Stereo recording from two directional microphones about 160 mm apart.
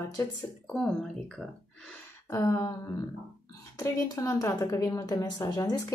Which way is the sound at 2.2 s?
15° left (ahead or behind).